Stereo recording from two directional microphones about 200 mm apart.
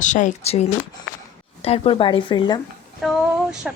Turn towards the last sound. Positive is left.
turn(degrees=-5)  # may be behind; listen again after turning